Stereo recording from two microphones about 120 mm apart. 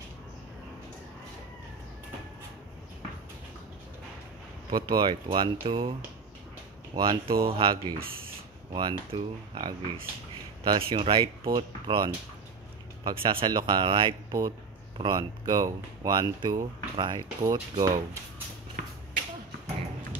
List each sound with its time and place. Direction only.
4.6 s speech: 40° right (ahead or behind)
7.0 s speech: 45° right (ahead or behind); by 18.0 s 30° right (ahead or behind)
18.8 s finger snapping: 90° right